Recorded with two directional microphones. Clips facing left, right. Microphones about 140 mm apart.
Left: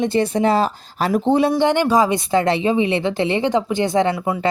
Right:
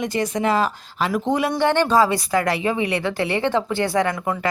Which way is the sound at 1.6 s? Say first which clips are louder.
Left 1 dB; 15° left (ahead or behind).